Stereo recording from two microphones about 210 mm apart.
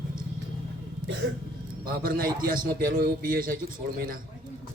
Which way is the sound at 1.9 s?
45° right (ahead or behind).